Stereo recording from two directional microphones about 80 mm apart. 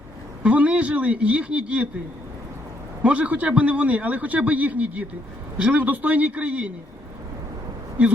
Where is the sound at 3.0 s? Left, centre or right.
Centre.